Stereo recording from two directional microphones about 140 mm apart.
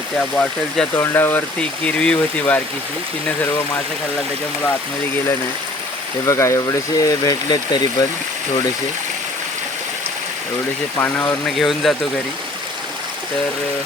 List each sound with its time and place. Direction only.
0.2 s speech: 10° left (ahead or behind)
6.2 s speech: 20° left (ahead or behind)
10.9 s speech: 15° left (ahead or behind)
11.4 s speech: centre (ahead or behind)